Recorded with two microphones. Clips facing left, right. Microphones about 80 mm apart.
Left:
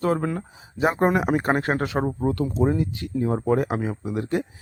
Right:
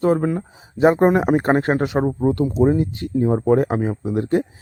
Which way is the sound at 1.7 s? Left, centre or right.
Right.